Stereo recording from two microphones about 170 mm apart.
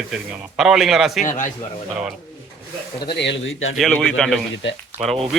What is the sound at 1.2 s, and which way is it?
Speech, 50° left (ahead or behind).